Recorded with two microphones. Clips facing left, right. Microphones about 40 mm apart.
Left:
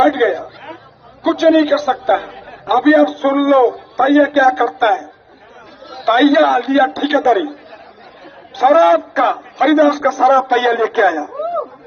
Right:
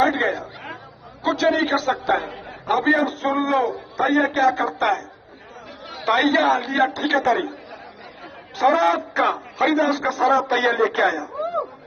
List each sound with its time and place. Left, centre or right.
0.0 s a woman's voice: left
6.1 s a man's voice: left
8.5 s a man's voice: left